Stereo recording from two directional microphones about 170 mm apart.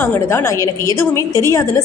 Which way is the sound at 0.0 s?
15° left (ahead or behind).